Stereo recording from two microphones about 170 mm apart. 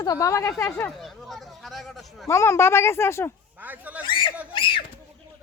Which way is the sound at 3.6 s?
10° right (ahead or behind).